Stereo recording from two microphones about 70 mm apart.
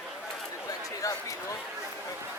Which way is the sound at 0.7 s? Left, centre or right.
Left.